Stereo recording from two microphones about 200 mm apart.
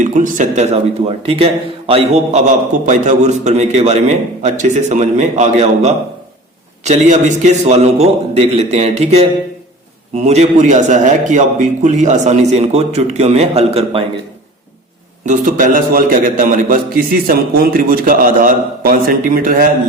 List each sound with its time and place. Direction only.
0.0 s a man's voice: 40° right (ahead or behind)
15.3 s a man's voice: 40° right (ahead or behind)